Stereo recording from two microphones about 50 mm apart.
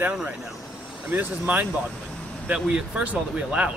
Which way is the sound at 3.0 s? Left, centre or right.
Right.